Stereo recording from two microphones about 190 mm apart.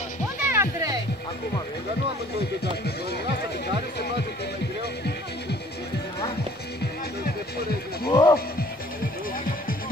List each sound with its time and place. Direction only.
0.4 s music: 10° right (ahead or behind)
2.6 s speech: 55° left (ahead or behind)
7.2 s music: 55° left (ahead or behind)
8.1 s music: 20° left (ahead or behind)